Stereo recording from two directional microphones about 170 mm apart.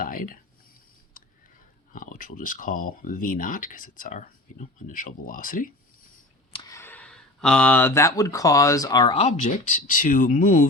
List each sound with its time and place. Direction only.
0.0 s speech: 55° left (ahead or behind)
1.2 s a sound: 55° left (ahead or behind)
1.9 s speech: 55° left (ahead or behind)
6.5 s a sound: 25° left (ahead or behind)
6.7 s speech: 10° left (ahead or behind)
9.1 s speech: 35° left (ahead or behind)